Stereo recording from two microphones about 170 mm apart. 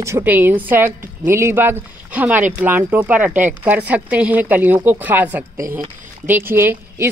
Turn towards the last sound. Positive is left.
turn(degrees=-15)  # may be behind; listen again after turning